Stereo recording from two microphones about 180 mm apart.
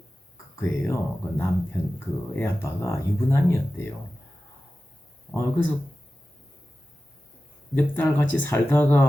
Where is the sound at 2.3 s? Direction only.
15° left (ahead or behind).